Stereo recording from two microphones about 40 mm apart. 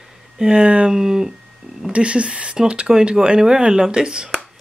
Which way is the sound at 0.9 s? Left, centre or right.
Centre.